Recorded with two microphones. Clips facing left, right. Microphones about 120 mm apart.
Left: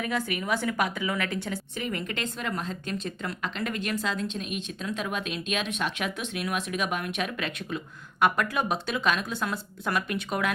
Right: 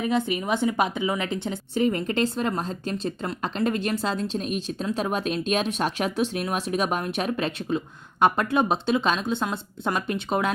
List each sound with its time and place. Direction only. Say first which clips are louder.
0.0 s a woman's voice: right 5 dB; 25° right (ahead or behind)